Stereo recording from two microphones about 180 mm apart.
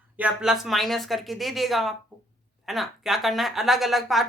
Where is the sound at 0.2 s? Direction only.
5° right (ahead or behind).